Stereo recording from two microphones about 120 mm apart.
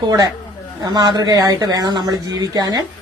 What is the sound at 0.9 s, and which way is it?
Speech, 35° right (ahead or behind).